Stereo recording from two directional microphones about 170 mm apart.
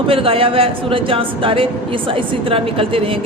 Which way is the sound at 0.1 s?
35° right (ahead or behind).